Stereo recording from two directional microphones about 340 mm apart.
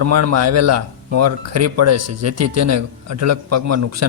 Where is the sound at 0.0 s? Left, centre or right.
Right.